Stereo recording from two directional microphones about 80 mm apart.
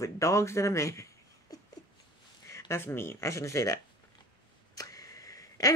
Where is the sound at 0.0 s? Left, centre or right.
Left.